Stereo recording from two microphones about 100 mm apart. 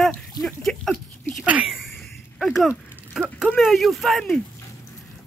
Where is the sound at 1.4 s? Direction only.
10° right (ahead or behind).